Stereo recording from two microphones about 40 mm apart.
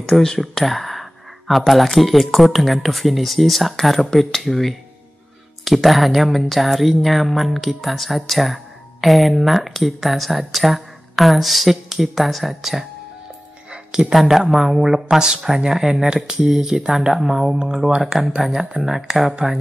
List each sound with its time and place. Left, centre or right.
0.4 s speech: centre
13.7 s music: right
14.1 s speech: centre